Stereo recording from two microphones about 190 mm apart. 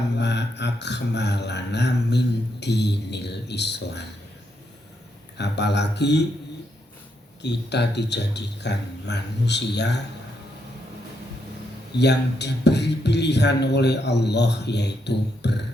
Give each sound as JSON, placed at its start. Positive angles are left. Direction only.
{"t": 0.2, "sound": "a sound", "side_deg": 65}
{"t": 5.4, "sound": "speech", "side_deg": 65}
{"t": 7.4, "sound": "speech", "side_deg": 65}
{"t": 11.9, "sound": "speech", "side_deg": 65}